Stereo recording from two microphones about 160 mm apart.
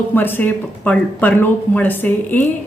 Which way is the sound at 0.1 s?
10° left (ahead or behind).